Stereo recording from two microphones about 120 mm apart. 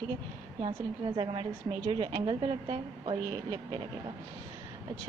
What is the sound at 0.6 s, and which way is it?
A woman's voice, 45° right (ahead or behind).